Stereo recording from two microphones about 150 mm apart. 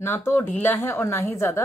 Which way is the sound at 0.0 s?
15° left (ahead or behind).